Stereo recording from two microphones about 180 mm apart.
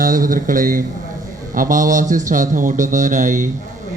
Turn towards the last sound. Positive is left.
turn(degrees=-45)  # may be behind; listen again after turning